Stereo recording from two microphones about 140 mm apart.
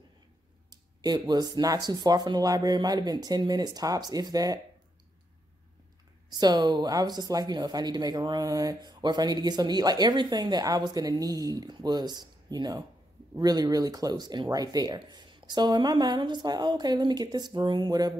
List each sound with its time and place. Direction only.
0.7 s speech: 30° right (ahead or behind)
6.4 s speech: 30° right (ahead or behind)